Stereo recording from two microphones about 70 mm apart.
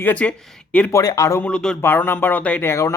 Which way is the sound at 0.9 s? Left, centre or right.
Left.